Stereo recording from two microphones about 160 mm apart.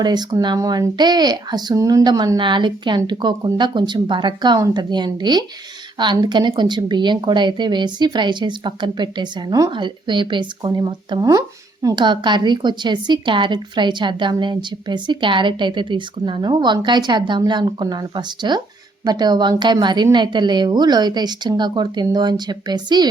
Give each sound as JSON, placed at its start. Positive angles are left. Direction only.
{"t": 0.0, "sound": "a woman's voice", "side_deg": -25}